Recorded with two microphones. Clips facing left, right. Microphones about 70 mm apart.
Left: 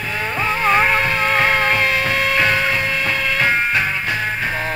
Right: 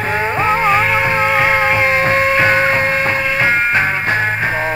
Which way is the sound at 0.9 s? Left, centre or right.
Centre.